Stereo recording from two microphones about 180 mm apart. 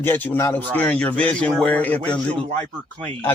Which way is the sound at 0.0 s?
10° left (ahead or behind).